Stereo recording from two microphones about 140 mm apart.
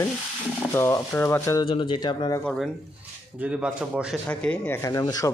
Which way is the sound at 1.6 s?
35° left (ahead or behind).